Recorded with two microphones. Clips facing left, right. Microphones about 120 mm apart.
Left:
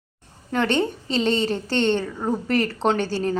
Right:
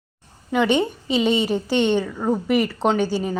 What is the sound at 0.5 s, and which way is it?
A woman's voice, 10° right (ahead or behind).